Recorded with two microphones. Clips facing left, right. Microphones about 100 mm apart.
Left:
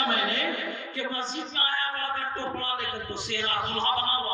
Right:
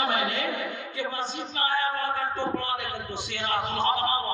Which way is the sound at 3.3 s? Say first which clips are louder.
Right 2 dB; 15° right (ahead or behind).